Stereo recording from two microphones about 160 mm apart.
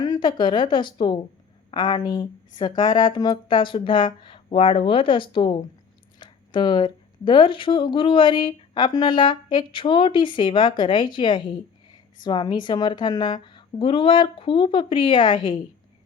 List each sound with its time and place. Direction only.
0.0 s a woman's voice: 25° left (ahead or behind)